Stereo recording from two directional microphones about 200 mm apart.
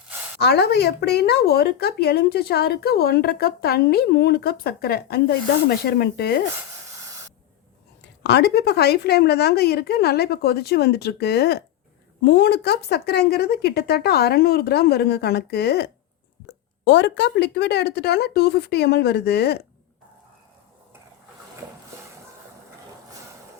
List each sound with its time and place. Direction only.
0.3 s speech: 55° left (ahead or behind)
7.0 s spray: 15° right (ahead or behind)
8.2 s speech: 55° left (ahead or behind)